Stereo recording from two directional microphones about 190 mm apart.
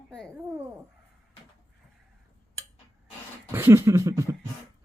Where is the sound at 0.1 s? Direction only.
5° left (ahead or behind).